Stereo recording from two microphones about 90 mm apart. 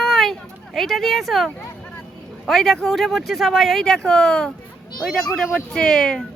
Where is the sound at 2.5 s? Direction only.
5° left (ahead or behind).